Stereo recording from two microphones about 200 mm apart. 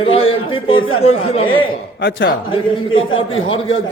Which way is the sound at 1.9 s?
60° left (ahead or behind).